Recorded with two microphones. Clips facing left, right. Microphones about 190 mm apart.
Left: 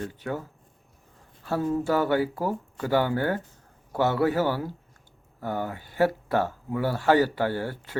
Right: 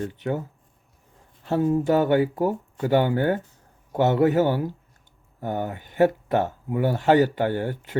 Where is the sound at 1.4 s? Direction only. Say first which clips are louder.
Right 4 dB; 20° right (ahead or behind).